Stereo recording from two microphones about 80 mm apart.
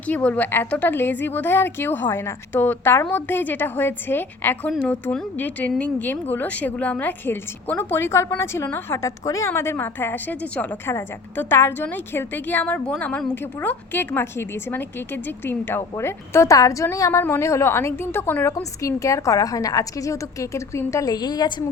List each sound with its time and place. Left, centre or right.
0.0 s a woman's voice: centre
9.0 s a woman's voice: left
9.5 s a woman's voice: left
10.8 s a woman's voice: left
18.8 s a woman's voice: left
21.1 s a woman's voice: left